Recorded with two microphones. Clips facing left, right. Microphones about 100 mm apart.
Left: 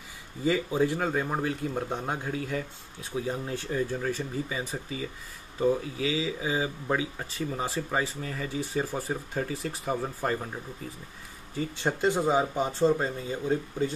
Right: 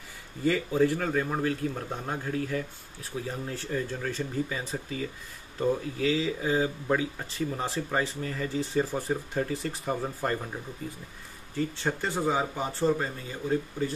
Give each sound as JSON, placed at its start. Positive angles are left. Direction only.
{"t": 0.4, "sound": "a man's voice", "side_deg": 15}
{"t": 11.5, "sound": "speech", "side_deg": 15}